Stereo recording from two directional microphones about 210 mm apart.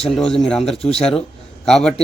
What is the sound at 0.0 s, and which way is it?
Speech, centre (ahead or behind).